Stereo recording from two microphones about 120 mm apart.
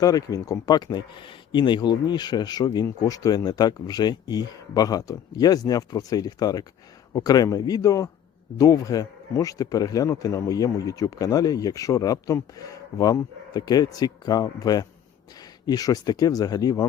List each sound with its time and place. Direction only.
0.0 s a man's voice: 30° left (ahead or behind)